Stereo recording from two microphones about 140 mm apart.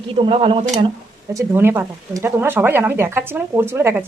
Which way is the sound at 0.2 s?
40° right (ahead or behind).